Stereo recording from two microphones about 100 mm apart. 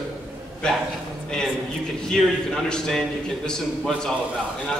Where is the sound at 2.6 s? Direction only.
5° left (ahead or behind).